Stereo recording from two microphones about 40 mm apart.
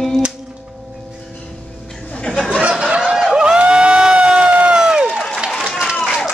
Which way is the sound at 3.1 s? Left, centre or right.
Centre.